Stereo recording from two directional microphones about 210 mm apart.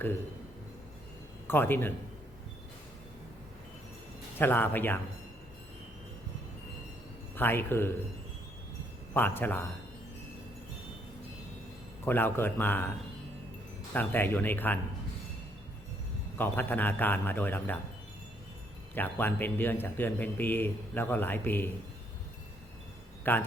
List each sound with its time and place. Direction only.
1.5 s a man's voice: 10° left (ahead or behind)
4.4 s a man's voice: 10° left (ahead or behind)
7.3 s a man's voice: 10° left (ahead or behind)
9.1 s a man's voice: 10° left (ahead or behind)
12.0 s a man's voice: 10° left (ahead or behind)
13.9 s a man's voice: 10° left (ahead or behind)
16.4 s a man's voice: 10° left (ahead or behind)
18.9 s a man's voice: 10° left (ahead or behind)
23.3 s a man's voice: 10° left (ahead or behind)